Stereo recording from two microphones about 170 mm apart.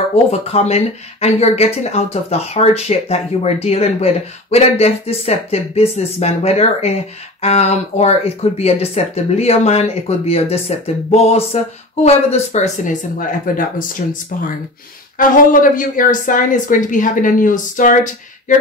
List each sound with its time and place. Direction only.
0.1 s speech: 40° left (ahead or behind)